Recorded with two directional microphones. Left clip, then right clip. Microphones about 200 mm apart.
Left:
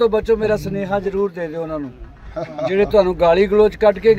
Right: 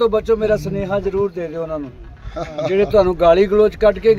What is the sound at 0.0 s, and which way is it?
Speech, centre (ahead or behind).